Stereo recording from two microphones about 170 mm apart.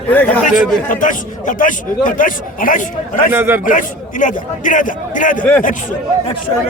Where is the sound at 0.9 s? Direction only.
50° left (ahead or behind).